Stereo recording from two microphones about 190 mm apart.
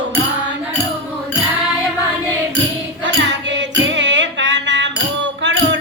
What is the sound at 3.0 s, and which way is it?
Music, 70° right (ahead or behind).